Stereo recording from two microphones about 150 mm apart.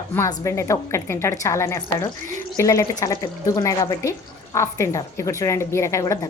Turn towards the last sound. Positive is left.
turn(degrees=20)  # may be behind; listen again after turning